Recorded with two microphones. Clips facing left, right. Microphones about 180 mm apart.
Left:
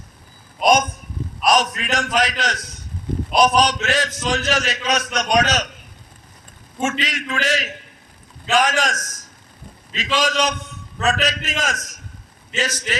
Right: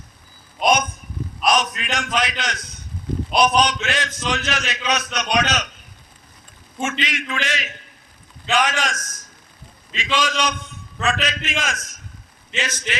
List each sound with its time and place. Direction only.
0.6 s a sound: 40° left (ahead or behind)
1.5 s a man's voice: 40° left (ahead or behind)
7.0 s a man's voice: 40° left (ahead or behind)